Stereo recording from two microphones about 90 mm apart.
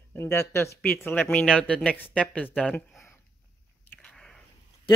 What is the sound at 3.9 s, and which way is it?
Biting, 5° left (ahead or behind).